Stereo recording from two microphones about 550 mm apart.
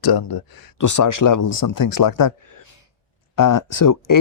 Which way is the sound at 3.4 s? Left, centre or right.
Left.